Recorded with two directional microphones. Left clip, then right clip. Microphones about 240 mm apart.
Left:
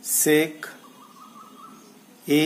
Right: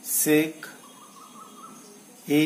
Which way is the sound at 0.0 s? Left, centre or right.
Left.